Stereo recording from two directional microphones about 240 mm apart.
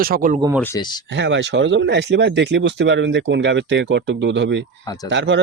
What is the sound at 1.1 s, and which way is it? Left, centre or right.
Speech, right.